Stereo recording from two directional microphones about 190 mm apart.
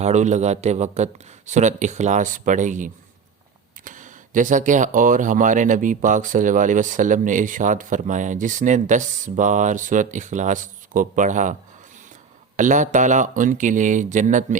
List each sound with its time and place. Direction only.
0.0 s speech: 40° right (ahead or behind)
12.5 s speech: 40° right (ahead or behind)